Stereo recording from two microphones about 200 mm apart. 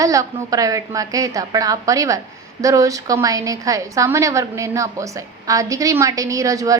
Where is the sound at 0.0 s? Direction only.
15° right (ahead or behind).